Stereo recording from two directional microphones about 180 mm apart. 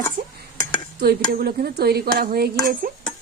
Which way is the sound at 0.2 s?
50° right (ahead or behind).